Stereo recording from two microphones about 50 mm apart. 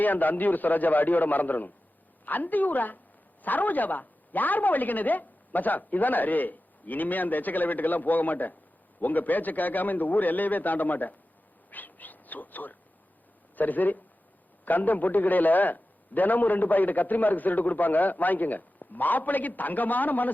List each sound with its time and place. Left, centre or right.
0.0 s a man's voice: left
11.7 s a sound: left
13.6 s a man's voice: left